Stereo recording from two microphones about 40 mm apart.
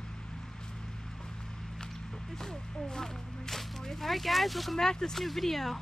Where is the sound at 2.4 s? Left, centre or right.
Centre.